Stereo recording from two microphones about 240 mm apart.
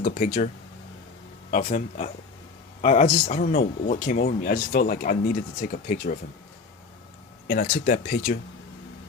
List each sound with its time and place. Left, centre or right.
0.0 s speech: left
1.5 s speech: left
7.4 s speech: left